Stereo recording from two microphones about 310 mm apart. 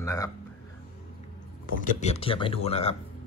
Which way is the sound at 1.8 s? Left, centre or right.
Left.